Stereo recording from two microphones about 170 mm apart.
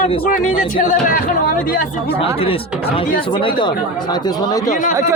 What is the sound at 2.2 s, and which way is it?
Speech, 35° left (ahead or behind).